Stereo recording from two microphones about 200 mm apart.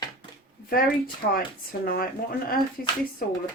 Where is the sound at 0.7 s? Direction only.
45° left (ahead or behind).